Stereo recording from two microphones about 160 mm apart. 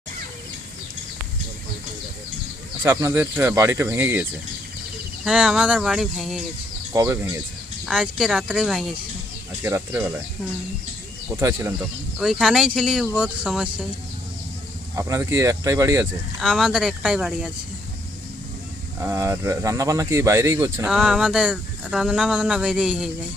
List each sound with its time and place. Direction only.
2.8 s speech: 15° right (ahead or behind)
6.9 s speech: 20° right (ahead or behind)
7.9 s speech: 5° right (ahead or behind)
9.6 s speech: 15° right (ahead or behind)
11.3 s speech: 15° right (ahead or behind)
12.2 s speech: centre (ahead or behind)
14.9 s speech: 20° right (ahead or behind)
16.4 s speech: 5° right (ahead or behind)
18.9 s speech: 15° right (ahead or behind)
20.9 s speech: 5° right (ahead or behind)